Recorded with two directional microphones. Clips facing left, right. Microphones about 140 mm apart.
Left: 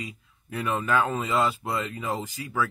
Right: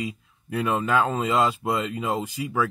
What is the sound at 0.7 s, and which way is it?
Speech, 15° right (ahead or behind).